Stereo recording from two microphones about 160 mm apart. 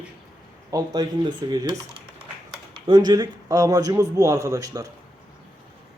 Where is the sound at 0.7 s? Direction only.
25° right (ahead or behind).